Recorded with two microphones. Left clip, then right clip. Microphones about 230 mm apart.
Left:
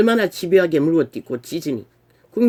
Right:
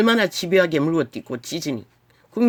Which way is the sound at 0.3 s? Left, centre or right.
Right.